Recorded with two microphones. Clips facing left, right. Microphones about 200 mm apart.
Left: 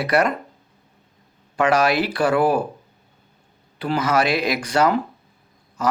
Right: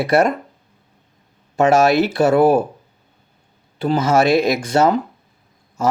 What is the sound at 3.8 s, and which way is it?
Speech, 25° right (ahead or behind).